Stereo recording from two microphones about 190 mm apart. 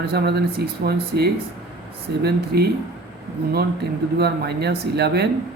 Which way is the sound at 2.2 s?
55° right (ahead or behind).